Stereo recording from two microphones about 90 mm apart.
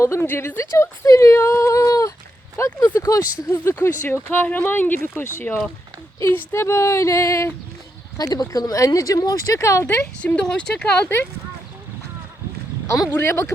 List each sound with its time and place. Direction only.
0.0 s speech: 30° left (ahead or behind)
8.2 s speech: 45° left (ahead or behind)
9.8 s speech: 15° left (ahead or behind)
12.9 s speech: 35° left (ahead or behind)